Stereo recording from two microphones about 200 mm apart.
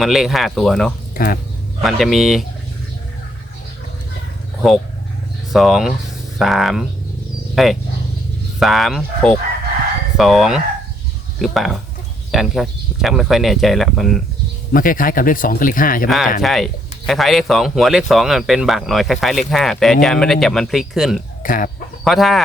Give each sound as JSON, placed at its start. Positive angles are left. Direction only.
{"t": 0.0, "sound": "speech", "side_deg": 0}
{"t": 1.1, "sound": "speech", "side_deg": 45}
{"t": 1.8, "sound": "speech", "side_deg": 0}
{"t": 5.5, "sound": "speech", "side_deg": 0}
{"t": 14.7, "sound": "speech", "side_deg": 45}
{"t": 16.0, "sound": "speech", "side_deg": 0}
{"t": 21.4, "sound": "speech", "side_deg": 45}
{"t": 22.0, "sound": "speech", "side_deg": 0}